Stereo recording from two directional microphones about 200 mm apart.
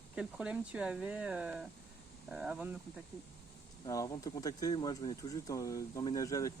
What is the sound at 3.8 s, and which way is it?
Speech, 15° left (ahead or behind).